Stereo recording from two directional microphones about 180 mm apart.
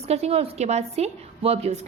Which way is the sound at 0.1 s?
35° right (ahead or behind).